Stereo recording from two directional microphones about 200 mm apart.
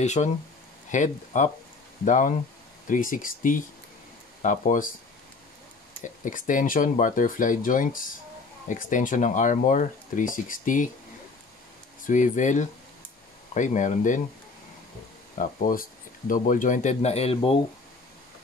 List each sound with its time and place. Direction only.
0.0 s speech: 35° left (ahead or behind)
5.9 s speech: 40° left (ahead or behind)
12.1 s speech: 40° left (ahead or behind)
15.3 s speech: 45° left (ahead or behind)